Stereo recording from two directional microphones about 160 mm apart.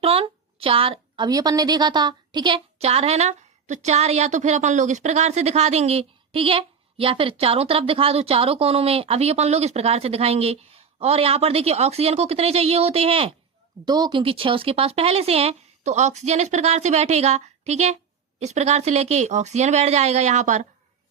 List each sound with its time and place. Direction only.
0.0 s a woman's voice: 35° right (ahead or behind)
13.8 s a woman's voice: 25° right (ahead or behind); by 20.7 s 45° right (ahead or behind)